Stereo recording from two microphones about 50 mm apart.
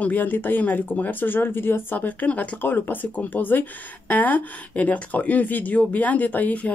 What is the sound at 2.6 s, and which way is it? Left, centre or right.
Speech, left.